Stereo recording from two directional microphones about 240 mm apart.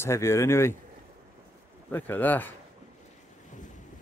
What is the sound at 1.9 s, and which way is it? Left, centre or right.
Speech, centre.